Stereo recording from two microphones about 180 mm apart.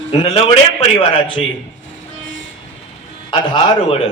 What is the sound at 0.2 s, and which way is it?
Speech, 35° left (ahead or behind).